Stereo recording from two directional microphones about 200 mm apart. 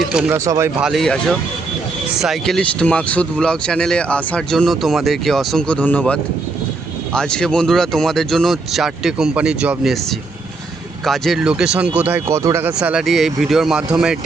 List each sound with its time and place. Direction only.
0.1 s speech: 5° right (ahead or behind)
0.3 s speech: 15° right (ahead or behind)
0.8 s speech: centre (ahead or behind)
11.0 s speech: centre (ahead or behind)